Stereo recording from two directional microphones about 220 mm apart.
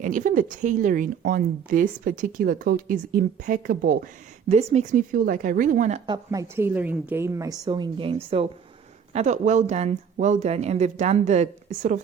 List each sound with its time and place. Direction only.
0.0 s speech: 35° right (ahead or behind)
6.1 s a woman's voice: 15° right (ahead or behind); by 11.9 s 35° right (ahead or behind)